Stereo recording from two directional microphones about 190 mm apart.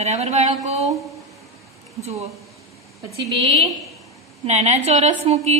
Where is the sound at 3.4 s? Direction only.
30° right (ahead or behind).